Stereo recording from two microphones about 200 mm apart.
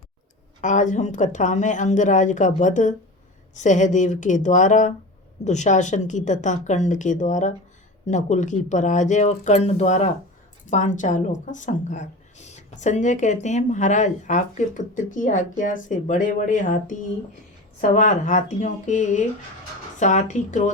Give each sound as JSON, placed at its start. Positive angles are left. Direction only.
{"t": 0.6, "sound": "speech", "side_deg": 40}